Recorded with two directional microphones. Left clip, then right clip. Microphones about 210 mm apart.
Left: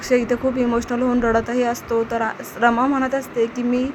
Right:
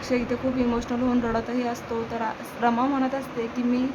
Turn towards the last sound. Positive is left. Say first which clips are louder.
# left 7 dB
turn(degrees=25)  # may be behind; listen again after turning